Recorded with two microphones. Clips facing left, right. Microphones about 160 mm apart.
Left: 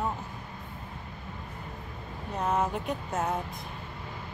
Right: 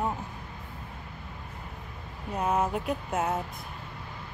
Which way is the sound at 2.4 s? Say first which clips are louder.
Right 1 dB; 5° right (ahead or behind).